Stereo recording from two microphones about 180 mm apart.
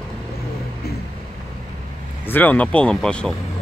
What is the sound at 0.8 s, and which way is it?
Vehicle, 60° left (ahead or behind).